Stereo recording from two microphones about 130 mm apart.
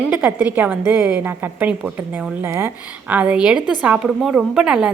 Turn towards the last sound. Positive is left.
turn(degrees=-5)  # may be behind; listen again after turning